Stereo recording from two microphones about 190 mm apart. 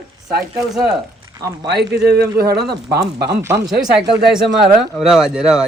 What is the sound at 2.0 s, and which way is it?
Speech, 55° right (ahead or behind).